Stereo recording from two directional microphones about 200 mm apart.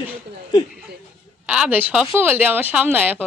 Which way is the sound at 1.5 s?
5° right (ahead or behind).